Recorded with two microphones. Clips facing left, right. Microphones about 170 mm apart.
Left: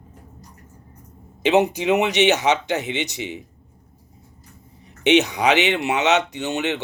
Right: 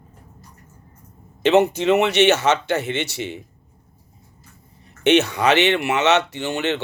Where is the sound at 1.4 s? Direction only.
15° left (ahead or behind).